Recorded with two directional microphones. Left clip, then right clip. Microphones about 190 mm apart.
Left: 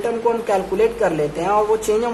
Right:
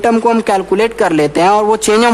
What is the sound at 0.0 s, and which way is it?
A woman's voice, 55° right (ahead or behind).